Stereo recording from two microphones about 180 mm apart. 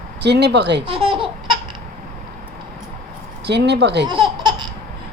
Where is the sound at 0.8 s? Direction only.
30° right (ahead or behind).